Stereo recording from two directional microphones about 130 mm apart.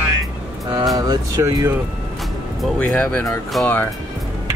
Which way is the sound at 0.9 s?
25° right (ahead or behind).